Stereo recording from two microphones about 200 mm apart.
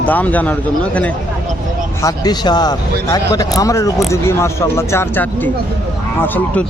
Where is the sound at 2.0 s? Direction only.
20° left (ahead or behind).